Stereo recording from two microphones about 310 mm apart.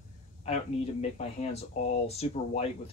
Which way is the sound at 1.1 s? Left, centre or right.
Left.